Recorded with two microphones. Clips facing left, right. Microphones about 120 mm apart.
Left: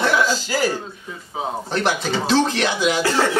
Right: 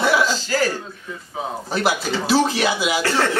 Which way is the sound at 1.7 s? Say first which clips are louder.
Right 1 dB; 5° right (ahead or behind).